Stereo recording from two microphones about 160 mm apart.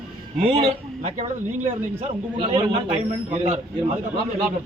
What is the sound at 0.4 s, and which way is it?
Speech, 35° right (ahead or behind).